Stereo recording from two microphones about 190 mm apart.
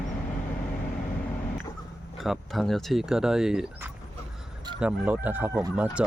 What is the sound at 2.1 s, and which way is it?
Speech, centre (ahead or behind).